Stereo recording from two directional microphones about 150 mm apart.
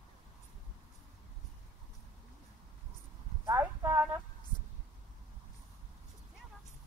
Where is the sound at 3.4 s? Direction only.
15° right (ahead or behind).